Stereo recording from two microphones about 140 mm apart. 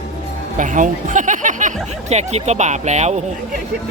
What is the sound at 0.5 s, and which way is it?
Speech, 65° right (ahead or behind).